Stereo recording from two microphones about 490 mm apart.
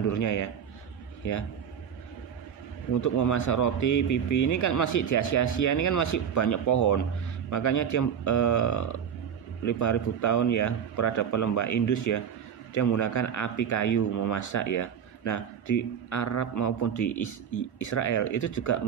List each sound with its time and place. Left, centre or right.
0.1 s a man's voice: left
3.0 s a man's voice: left